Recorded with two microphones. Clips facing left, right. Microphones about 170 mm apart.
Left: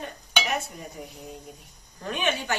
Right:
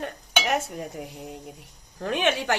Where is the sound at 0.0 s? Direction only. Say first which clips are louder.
Right 3 dB; 75° right (ahead or behind).